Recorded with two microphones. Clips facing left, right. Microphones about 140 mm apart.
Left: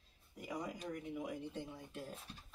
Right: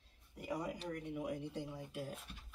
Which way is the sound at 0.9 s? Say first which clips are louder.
Right 1 dB; 5° left (ahead or behind).